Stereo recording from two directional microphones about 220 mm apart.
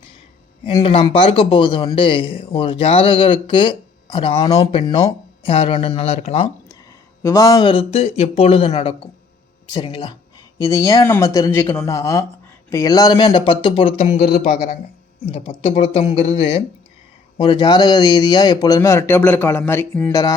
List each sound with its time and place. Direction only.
0.6 s a man's voice: 25° left (ahead or behind)
7.2 s a man's voice: 15° left (ahead or behind)